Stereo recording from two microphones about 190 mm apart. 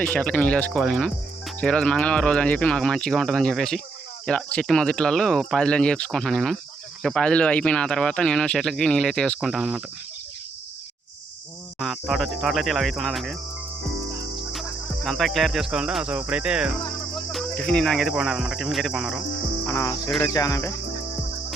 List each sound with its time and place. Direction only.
0.0 s speech: 5° left (ahead or behind)
11.8 s speech: centre (ahead or behind)
19.6 s cricket: 15° left (ahead or behind)